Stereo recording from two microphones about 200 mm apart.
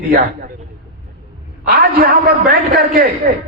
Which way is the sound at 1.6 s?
50° right (ahead or behind).